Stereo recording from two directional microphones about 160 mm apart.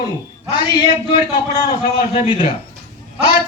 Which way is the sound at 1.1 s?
30° left (ahead or behind).